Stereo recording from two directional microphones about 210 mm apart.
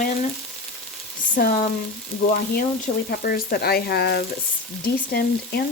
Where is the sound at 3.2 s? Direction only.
45° left (ahead or behind).